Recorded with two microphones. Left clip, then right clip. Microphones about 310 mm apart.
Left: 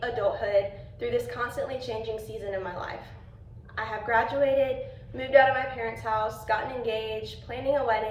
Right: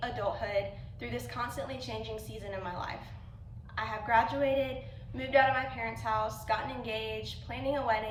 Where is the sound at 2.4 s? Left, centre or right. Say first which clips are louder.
Left 2 dB; right.